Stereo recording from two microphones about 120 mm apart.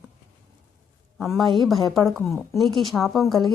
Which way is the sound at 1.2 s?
Centre (ahead or behind).